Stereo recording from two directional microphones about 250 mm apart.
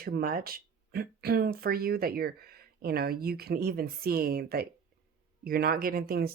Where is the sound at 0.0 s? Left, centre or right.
Right.